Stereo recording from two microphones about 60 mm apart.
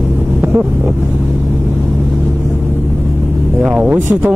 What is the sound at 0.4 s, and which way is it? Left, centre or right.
Vehicle, right.